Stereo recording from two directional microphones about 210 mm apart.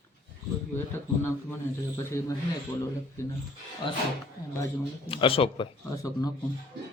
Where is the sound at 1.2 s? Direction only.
10° left (ahead or behind).